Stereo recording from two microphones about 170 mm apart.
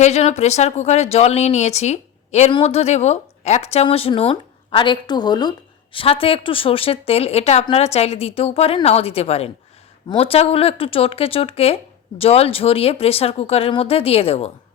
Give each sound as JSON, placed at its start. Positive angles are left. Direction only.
{"t": 0.0, "sound": "speech", "side_deg": 40}